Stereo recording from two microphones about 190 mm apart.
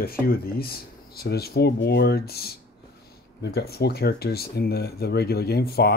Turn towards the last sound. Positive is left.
turn(degrees=55)  # may be behind; listen again after turning